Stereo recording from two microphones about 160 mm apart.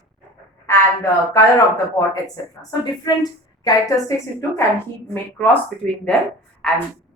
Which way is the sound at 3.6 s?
20° left (ahead or behind).